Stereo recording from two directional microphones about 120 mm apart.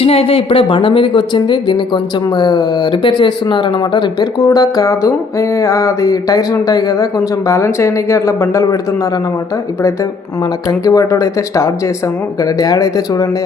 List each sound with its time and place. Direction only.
0.0 s speech: 55° left (ahead or behind)
4.4 s music: 30° left (ahead or behind)
10.7 s music: 25° left (ahead or behind)
12.4 s speech: 30° left (ahead or behind)